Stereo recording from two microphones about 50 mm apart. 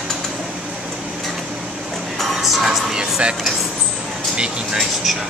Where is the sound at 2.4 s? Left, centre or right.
Centre.